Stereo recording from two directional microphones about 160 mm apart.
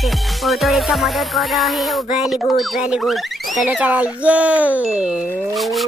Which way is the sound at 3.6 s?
5° right (ahead or behind).